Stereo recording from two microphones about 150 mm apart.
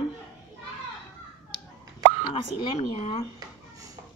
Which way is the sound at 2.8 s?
45° left (ahead or behind).